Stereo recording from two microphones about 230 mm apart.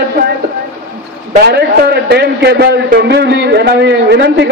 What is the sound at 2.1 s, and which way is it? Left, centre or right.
A man's voice, right.